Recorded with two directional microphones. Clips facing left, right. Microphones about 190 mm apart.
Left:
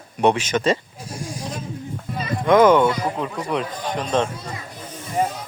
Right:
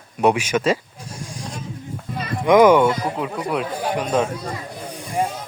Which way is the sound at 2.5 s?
10° right (ahead or behind).